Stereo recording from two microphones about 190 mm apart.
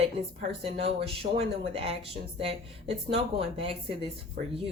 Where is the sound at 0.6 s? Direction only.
30° right (ahead or behind).